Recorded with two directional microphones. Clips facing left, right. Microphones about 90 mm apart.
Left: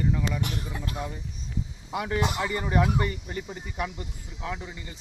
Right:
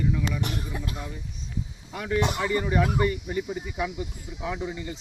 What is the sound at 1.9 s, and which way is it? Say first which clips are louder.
Speech: right 1 dB; 15° left (ahead or behind).